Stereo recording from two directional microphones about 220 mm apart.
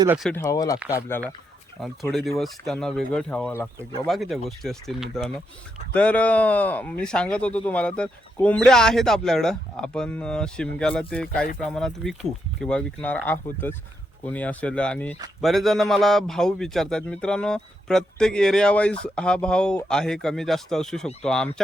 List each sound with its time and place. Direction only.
0.2 s a man's voice: 5° left (ahead or behind)
0.4 s speech: 15° left (ahead or behind)
1.8 s a man's voice: centre (ahead or behind)